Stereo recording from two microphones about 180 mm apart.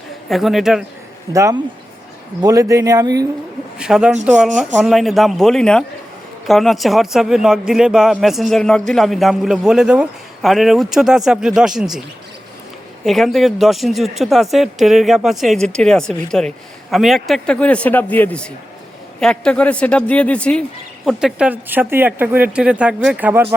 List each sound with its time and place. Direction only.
0.3 s speech: centre (ahead or behind)
1.3 s speech: 15° right (ahead or behind)
3.8 s a man's voice: 5° right (ahead or behind)
13.1 s speech: centre (ahead or behind)